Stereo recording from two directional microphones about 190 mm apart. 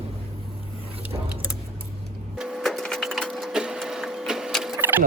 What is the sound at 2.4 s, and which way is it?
Wood, centre (ahead or behind).